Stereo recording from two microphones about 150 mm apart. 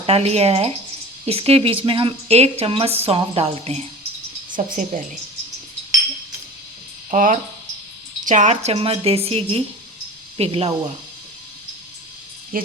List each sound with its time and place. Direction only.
0.0 s a woman's voice: 40° right (ahead or behind)
4.5 s speech: 65° right (ahead or behind)
7.1 s a woman's voice: 60° right (ahead or behind); by 10.7 s 40° right (ahead or behind)
12.5 s speech: 70° right (ahead or behind)